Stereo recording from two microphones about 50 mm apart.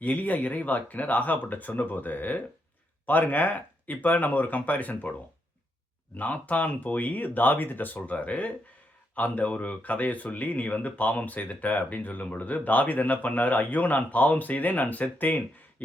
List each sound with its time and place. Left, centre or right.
0.0 s speech: left
6.1 s speech: left